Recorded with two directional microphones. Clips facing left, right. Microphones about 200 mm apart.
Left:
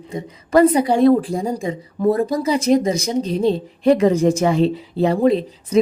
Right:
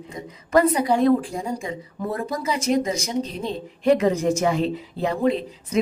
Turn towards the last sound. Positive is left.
turn(degrees=30)  # may be behind; listen again after turning